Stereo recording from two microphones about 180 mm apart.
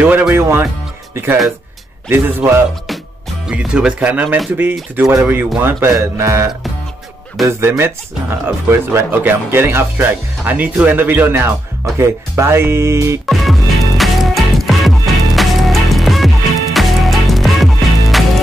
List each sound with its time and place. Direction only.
0.0 s speech: 10° right (ahead or behind)
13.3 s music: centre (ahead or behind)